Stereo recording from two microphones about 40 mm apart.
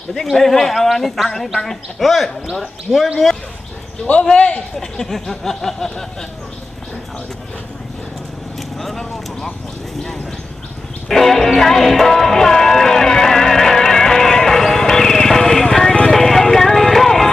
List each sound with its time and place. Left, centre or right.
0.1 s speech: centre
4.1 s a man's voice: left
4.7 s speech: centre
8.8 s speech: centre
11.1 s music: centre